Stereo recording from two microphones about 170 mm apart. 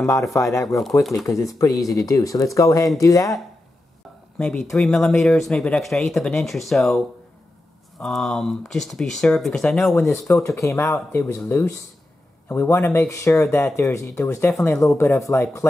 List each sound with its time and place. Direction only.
0.3 s speech: 20° left (ahead or behind)
4.4 s speech: 5° left (ahead or behind)
8.0 s speech: 5° left (ahead or behind)
10.0 s speech: 15° left (ahead or behind)